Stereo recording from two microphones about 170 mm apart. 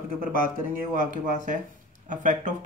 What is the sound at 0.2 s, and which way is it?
Speech, 55° right (ahead or behind).